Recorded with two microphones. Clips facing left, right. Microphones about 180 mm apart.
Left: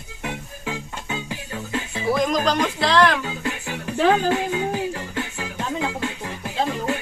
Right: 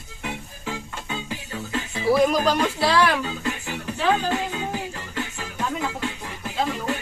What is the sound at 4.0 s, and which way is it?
Speech, 50° left (ahead or behind).